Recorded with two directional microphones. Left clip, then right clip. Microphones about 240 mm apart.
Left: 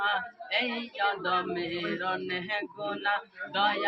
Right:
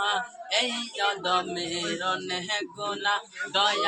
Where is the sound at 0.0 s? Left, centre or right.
Centre.